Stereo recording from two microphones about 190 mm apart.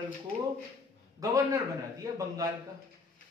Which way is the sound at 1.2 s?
20° right (ahead or behind).